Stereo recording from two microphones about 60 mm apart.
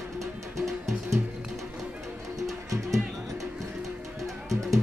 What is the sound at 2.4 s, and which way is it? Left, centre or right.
Music, right.